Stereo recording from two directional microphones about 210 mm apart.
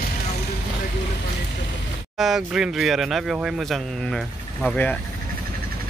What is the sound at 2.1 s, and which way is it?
Speech, centre (ahead or behind).